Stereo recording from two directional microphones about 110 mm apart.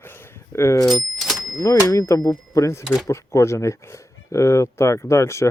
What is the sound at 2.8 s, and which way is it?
Speech, centre (ahead or behind).